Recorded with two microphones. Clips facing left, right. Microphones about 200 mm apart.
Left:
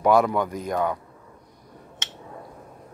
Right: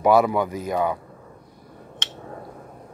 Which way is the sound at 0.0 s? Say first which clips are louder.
Right 2 dB; 5° right (ahead or behind).